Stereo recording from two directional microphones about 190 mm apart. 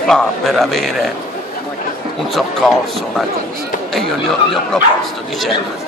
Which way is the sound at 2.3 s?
Centre (ahead or behind).